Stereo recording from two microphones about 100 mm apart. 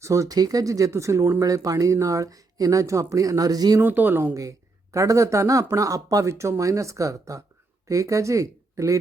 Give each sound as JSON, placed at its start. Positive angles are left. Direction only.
{"t": 0.0, "sound": "speech", "side_deg": -30}
{"t": 3.8, "sound": "speech", "side_deg": -20}
{"t": 4.4, "sound": "speech", "side_deg": -35}